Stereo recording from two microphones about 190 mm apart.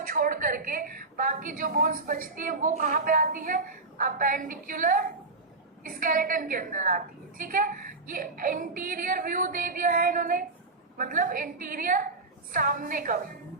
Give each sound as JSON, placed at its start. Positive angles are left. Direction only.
{"t": 0.0, "sound": "a woman's voice", "side_deg": -45}